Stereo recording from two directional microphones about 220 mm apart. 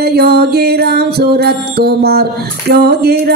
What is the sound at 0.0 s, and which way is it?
Music, 45° right (ahead or behind).